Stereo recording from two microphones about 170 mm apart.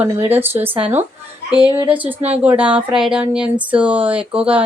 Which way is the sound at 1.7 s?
10° right (ahead or behind).